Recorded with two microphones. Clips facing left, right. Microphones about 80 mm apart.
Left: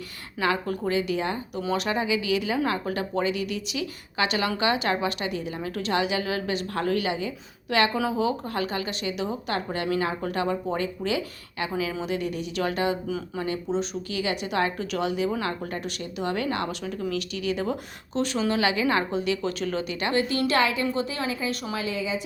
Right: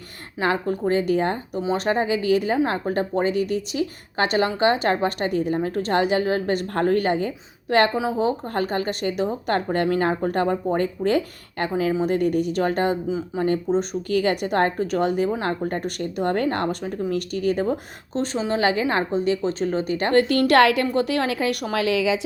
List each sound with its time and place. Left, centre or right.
0.3 s speech: right
0.9 s a woman's voice: right
13.1 s speech: right
13.4 s a woman's voice: right
20.1 s a woman's voice: right